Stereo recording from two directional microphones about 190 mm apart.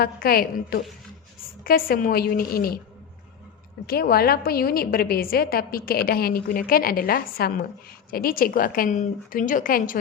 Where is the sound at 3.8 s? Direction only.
55° left (ahead or behind).